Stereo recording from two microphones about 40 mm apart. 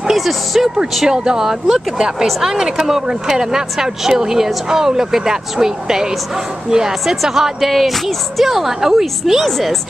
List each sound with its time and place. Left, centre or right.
0.0 s speech: centre
1.0 s speech: centre